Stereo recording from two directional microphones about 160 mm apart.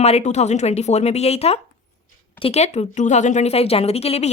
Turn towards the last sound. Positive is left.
turn(degrees=40)  # may be behind; listen again after turning